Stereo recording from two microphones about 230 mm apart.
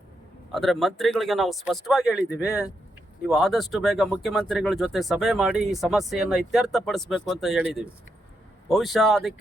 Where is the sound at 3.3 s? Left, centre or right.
Centre.